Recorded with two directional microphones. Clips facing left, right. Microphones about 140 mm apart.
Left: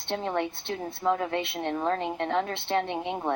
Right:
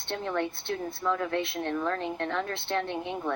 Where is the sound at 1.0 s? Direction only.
35° left (ahead or behind).